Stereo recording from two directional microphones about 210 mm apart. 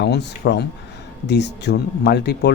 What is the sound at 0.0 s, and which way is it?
Speech, 55° left (ahead or behind).